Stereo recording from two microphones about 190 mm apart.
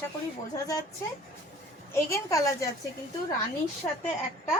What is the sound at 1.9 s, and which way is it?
Speech, 15° left (ahead or behind).